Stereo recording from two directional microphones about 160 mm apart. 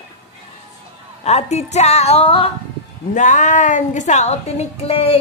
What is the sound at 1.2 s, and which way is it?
Speech, 40° left (ahead or behind).